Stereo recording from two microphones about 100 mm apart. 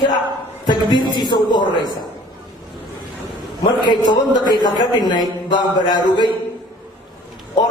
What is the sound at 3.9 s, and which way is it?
Speech, 50° left (ahead or behind).